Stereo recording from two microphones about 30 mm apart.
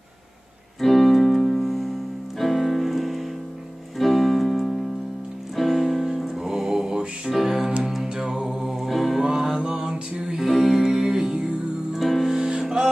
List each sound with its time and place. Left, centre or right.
0.7 s keyboard: centre
2.3 s music: centre
4.0 s keyboard: centre
5.6 s music: centre
6.3 s music: centre
8.1 s music: right
8.6 s music: centre
8.9 s music: centre
9.2 s mantra: right
10.3 s music: centre
10.9 s music: right
12.0 s music: centre